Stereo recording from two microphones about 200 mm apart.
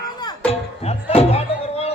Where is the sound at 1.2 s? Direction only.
30° left (ahead or behind).